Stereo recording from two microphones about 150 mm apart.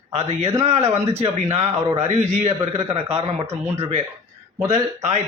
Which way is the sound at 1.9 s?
50° right (ahead or behind).